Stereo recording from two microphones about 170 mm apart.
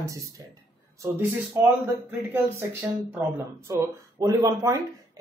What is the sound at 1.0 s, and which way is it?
A man's voice, 10° right (ahead or behind).